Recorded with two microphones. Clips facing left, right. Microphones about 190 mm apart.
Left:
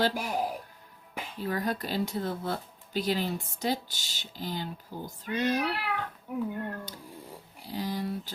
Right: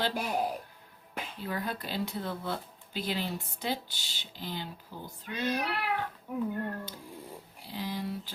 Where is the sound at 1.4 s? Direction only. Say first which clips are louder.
Left 5 dB; 40° left (ahead or behind).